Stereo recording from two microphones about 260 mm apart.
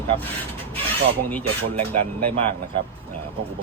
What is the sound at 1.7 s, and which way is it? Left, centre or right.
Speech, right.